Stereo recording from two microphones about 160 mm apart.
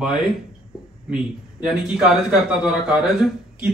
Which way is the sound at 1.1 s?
5° right (ahead or behind).